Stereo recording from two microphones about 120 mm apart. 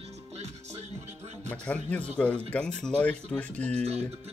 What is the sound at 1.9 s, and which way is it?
Speech, 10° left (ahead or behind).